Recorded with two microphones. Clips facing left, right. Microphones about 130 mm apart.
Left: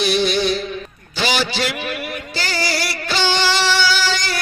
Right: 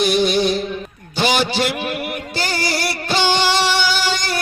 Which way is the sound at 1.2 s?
55° right (ahead or behind).